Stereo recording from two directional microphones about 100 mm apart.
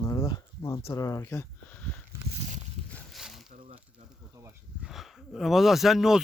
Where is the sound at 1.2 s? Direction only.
25° left (ahead or behind).